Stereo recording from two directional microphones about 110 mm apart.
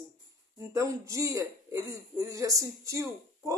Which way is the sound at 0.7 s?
30° right (ahead or behind).